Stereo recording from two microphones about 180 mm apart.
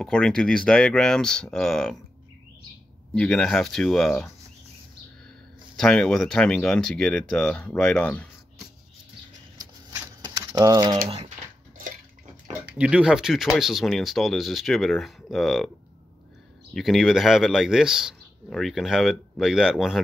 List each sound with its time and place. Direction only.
0.0 s speech: 5° left (ahead or behind)
3.2 s speech: 5° left (ahead or behind)
5.8 s speech: 5° left (ahead or behind)
9.6 s shuffling cards: 20° right (ahead or behind)
11.1 s speech: 35° right (ahead or behind)
12.7 s speech: 5° right (ahead or behind)
16.7 s speech: centre (ahead or behind)